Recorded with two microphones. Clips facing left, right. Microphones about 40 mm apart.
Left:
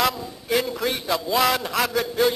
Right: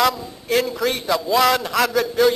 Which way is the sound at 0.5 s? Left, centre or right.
Centre.